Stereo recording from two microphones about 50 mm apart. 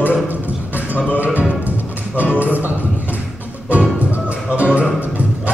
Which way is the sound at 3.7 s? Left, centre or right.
Right.